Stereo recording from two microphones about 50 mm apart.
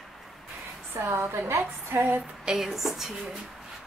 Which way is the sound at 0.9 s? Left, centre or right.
Right.